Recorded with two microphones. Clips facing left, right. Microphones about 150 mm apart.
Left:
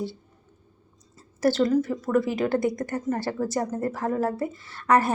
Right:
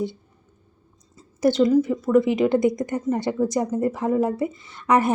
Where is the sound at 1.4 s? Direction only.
15° right (ahead or behind).